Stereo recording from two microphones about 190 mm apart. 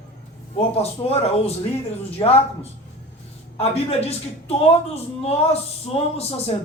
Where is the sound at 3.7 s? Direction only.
35° left (ahead or behind).